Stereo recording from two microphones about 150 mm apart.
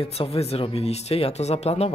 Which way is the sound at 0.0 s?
40° left (ahead or behind).